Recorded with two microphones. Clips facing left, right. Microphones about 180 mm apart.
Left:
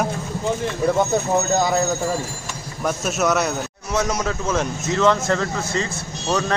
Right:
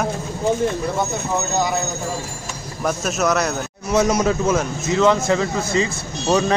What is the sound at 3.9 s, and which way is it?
Speech, 10° right (ahead or behind).